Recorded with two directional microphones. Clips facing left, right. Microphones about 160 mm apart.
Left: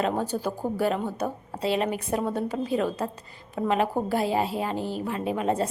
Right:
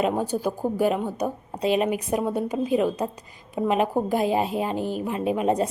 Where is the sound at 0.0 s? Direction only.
10° right (ahead or behind).